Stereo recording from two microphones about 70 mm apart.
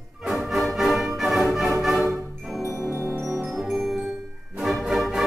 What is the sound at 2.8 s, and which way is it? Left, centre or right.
Mallet percussion, centre.